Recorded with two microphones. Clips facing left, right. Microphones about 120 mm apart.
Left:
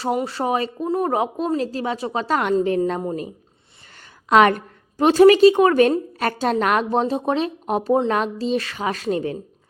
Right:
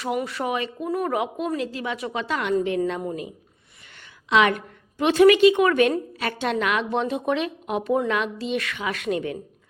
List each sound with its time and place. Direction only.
0.0 s a woman's voice: 30° left (ahead or behind)
4.0 s a woman's voice: 45° left (ahead or behind)